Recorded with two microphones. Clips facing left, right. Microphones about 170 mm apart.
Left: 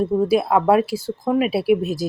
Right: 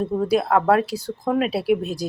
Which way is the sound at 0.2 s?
10° left (ahead or behind).